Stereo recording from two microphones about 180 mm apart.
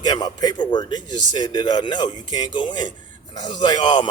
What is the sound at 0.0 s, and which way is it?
Speech, 20° left (ahead or behind).